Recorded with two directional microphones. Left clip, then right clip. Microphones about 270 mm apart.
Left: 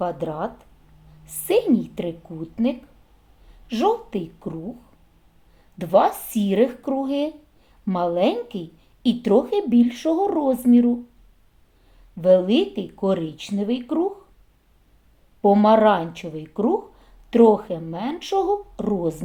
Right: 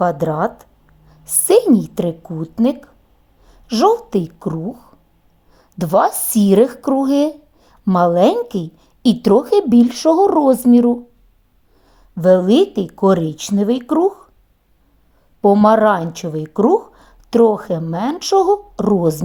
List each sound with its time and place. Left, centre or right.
0.0 s speech: right
5.7 s speech: right
12.1 s speech: right
15.4 s speech: right